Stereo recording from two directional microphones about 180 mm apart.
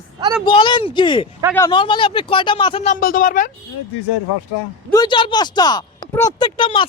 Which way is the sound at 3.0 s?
50° left (ahead or behind).